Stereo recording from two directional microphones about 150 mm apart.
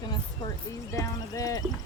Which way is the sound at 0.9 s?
20° left (ahead or behind).